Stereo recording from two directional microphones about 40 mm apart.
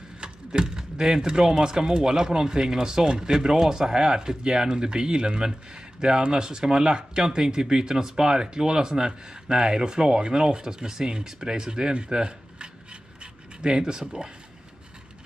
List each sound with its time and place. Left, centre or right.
0.2 s speech: centre